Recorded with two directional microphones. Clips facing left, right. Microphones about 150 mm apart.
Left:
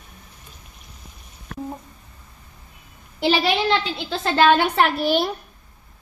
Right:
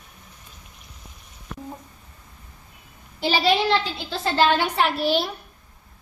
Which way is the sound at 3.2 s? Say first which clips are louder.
Left 1 dB; 65° left (ahead or behind).